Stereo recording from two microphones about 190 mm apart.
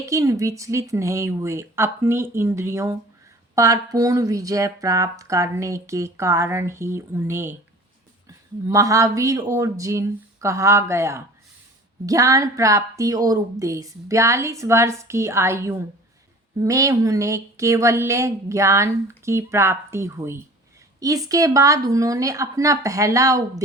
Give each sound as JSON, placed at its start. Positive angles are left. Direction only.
{"t": 0.0, "sound": "speech", "side_deg": -15}
{"t": 8.6, "sound": "speech", "side_deg": -15}